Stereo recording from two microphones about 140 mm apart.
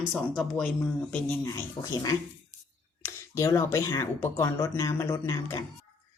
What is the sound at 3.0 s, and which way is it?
Speech, 20° left (ahead or behind).